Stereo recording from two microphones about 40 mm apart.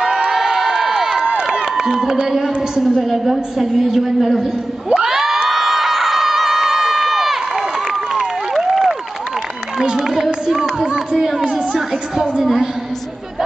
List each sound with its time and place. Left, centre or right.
0.3 s crowd: centre
2.2 s a sound: centre
2.8 s a woman's voice: centre
4.9 s crowd: centre
9.9 s run: centre
10.9 s a sound: centre
11.5 s music: centre